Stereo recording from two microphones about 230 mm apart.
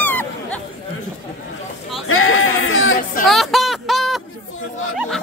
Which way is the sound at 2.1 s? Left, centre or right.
Left.